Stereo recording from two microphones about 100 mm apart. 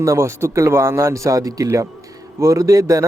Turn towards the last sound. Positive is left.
turn(degrees=-35)  # may be behind; listen again after turning